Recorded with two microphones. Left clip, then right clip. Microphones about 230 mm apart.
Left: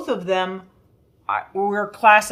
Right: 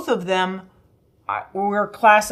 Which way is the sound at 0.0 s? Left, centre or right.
Right.